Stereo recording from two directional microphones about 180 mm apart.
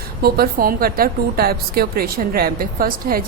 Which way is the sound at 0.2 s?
60° right (ahead or behind).